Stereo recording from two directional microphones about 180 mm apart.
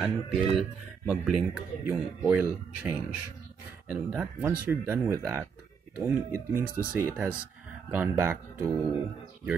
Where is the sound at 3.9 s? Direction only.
Centre (ahead or behind).